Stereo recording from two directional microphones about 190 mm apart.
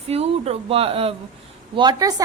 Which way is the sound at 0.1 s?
30° right (ahead or behind).